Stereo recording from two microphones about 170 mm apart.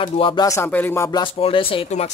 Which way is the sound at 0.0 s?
30° left (ahead or behind).